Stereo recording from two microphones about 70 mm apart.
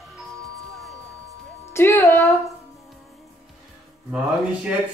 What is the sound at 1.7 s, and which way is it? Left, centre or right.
Music, left.